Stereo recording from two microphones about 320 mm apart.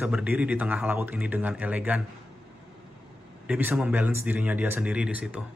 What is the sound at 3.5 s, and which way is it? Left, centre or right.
Speech, centre.